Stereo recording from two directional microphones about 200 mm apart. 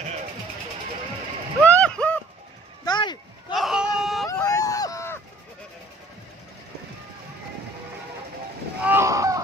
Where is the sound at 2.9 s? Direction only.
20° left (ahead or behind).